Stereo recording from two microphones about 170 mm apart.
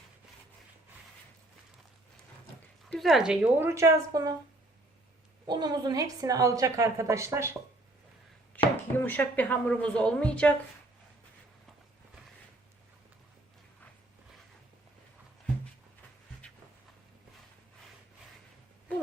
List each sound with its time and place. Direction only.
2.9 s a woman's voice: centre (ahead or behind); by 4.4 s 20° right (ahead or behind)
5.5 s a woman's voice: 25° right (ahead or behind)
8.7 s speech: 10° left (ahead or behind)